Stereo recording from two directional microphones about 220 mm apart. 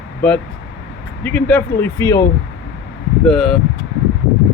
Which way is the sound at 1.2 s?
10° left (ahead or behind).